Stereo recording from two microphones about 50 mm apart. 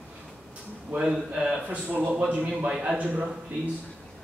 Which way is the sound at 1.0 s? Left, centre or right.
Centre.